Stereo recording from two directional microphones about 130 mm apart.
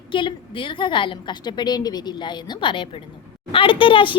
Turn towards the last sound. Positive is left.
turn(degrees=40)  # may be behind; listen again after turning